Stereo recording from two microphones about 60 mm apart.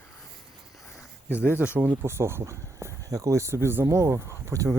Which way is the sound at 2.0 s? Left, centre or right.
Right.